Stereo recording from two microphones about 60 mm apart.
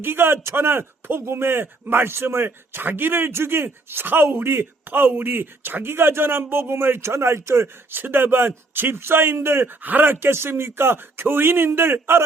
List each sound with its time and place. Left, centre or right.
0.0 s speech: right
9.8 s speech: right